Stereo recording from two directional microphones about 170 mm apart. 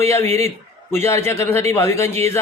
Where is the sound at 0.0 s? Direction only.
15° left (ahead or behind).